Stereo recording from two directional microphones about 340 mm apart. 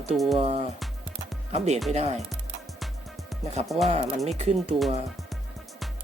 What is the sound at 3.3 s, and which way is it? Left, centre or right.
Music, centre.